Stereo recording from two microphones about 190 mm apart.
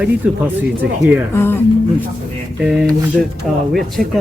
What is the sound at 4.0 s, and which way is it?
Speech, centre (ahead or behind).